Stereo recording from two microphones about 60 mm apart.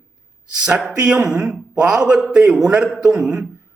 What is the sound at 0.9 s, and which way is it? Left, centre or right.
A man's voice, centre.